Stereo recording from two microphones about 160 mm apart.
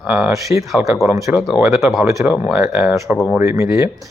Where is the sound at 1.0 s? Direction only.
20° right (ahead or behind).